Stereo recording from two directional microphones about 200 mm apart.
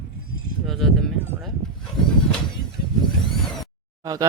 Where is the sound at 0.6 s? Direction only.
Centre (ahead or behind).